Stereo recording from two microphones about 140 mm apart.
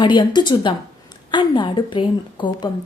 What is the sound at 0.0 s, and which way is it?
A woman's voice, 35° left (ahead or behind).